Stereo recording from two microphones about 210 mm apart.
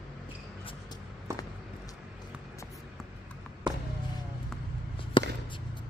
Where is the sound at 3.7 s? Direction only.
20° right (ahead or behind).